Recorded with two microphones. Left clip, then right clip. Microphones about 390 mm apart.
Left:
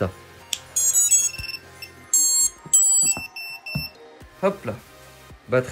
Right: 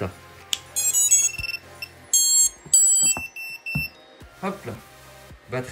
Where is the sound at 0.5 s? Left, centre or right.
Centre.